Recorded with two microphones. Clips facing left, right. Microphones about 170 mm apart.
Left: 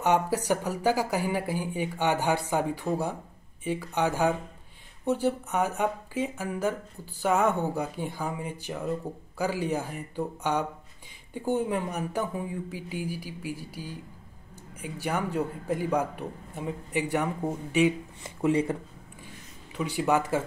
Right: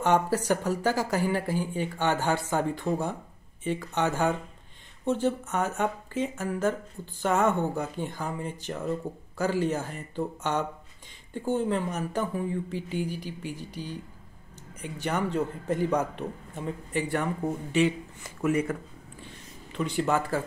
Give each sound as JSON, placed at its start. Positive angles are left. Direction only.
{"t": 0.0, "sound": "a man's voice", "side_deg": 15}
{"t": 18.2, "sound": "speech", "side_deg": 25}
{"t": 19.2, "sound": "a sound", "side_deg": 10}